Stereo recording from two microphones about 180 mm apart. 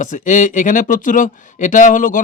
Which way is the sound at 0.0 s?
45° left (ahead or behind).